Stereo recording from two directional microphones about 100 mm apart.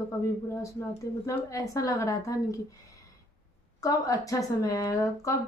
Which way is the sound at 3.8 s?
35° left (ahead or behind).